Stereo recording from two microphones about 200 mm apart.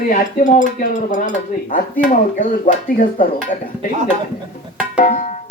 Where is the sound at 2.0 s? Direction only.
45° left (ahead or behind).